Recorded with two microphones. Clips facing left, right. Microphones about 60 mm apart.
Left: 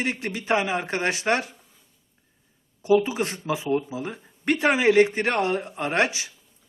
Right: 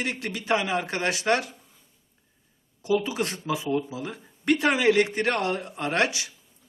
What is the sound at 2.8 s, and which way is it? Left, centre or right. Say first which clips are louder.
Speech: left 4 dB; left.